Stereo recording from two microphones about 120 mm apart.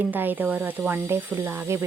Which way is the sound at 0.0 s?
15° right (ahead or behind).